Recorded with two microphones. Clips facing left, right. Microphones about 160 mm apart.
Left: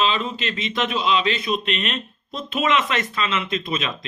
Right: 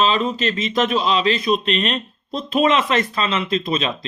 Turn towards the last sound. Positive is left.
turn(degrees=-30)  # may be behind; listen again after turning